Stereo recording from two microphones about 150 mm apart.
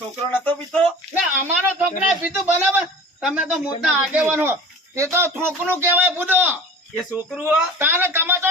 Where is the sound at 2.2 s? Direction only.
10° right (ahead or behind).